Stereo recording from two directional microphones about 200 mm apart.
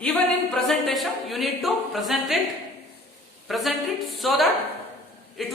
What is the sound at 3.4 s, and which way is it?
A woman's voice, centre (ahead or behind).